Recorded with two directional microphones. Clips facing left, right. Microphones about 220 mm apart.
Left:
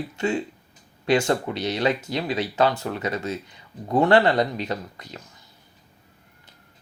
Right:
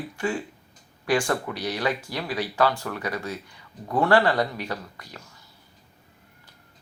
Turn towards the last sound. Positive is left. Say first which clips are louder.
# left 4 dB
turn(degrees=20)  # may be behind; listen again after turning